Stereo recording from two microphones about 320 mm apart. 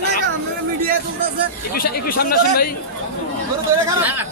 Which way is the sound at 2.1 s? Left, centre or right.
Left.